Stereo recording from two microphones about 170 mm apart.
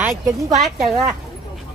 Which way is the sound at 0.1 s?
Centre (ahead or behind).